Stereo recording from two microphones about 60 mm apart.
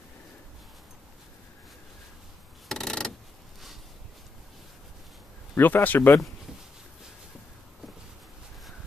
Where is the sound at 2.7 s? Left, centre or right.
Centre.